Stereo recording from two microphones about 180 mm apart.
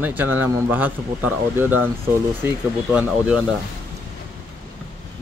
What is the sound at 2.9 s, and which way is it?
Speech, 5° right (ahead or behind).